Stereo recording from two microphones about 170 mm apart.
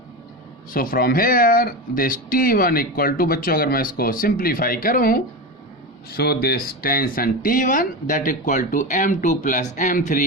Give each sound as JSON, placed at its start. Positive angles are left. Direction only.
{"t": 0.7, "sound": "speech", "side_deg": 60}
{"t": 6.1, "sound": "speech", "side_deg": 65}